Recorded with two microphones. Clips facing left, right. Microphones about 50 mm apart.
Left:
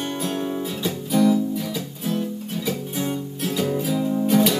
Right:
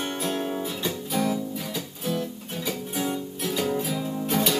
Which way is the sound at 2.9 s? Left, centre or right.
Centre.